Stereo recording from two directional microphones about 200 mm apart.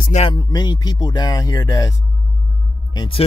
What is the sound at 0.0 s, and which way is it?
Speech, 35° left (ahead or behind).